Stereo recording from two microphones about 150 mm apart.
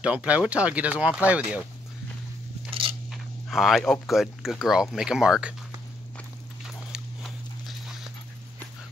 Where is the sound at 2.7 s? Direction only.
35° right (ahead or behind).